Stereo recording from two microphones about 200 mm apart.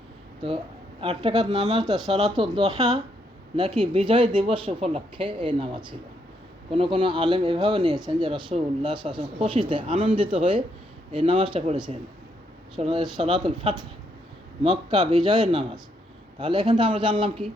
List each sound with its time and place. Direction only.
1.0 s speech: 25° right (ahead or behind)